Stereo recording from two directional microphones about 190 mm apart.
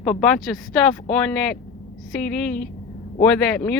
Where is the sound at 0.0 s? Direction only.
Centre (ahead or behind).